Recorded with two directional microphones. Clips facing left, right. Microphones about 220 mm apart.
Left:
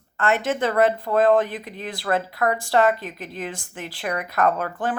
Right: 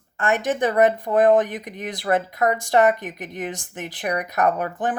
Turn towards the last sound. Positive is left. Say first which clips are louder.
# right 1 dB
turn(degrees=-15)  # may be behind; listen again after turning